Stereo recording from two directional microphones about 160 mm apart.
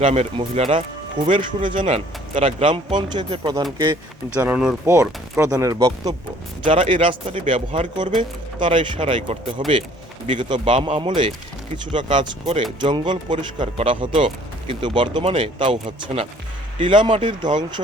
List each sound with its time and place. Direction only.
0.0 s speech: 40° right (ahead or behind)
1.9 s speech: 45° right (ahead or behind); by 3.9 s 25° right (ahead or behind)
4.4 s speech: 10° right (ahead or behind)
4.9 s speech: 20° right (ahead or behind)
6.9 s speech: 30° right (ahead or behind)